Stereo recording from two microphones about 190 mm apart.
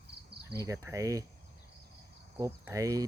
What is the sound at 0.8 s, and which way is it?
Speech, 15° right (ahead or behind).